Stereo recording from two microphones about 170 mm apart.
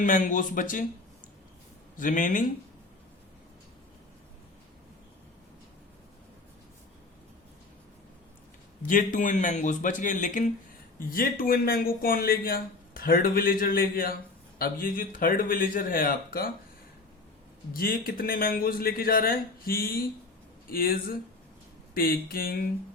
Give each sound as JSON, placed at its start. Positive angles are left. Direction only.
{"t": 0.0, "sound": "a man's voice", "side_deg": 50}
{"t": 2.0, "sound": "a man's voice", "side_deg": 50}
{"t": 8.9, "sound": "a man's voice", "side_deg": 50}
{"t": 17.7, "sound": "speech", "side_deg": 60}